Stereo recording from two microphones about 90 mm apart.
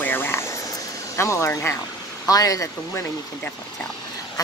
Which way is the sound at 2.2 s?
40° left (ahead or behind).